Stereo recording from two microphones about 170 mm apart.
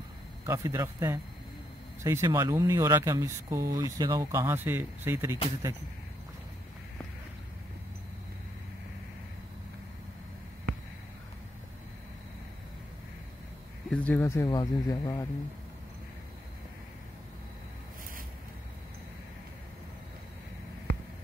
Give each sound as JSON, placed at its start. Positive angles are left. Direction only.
{"t": 0.5, "sound": "speech", "side_deg": -20}
{"t": 13.8, "sound": "speech", "side_deg": 10}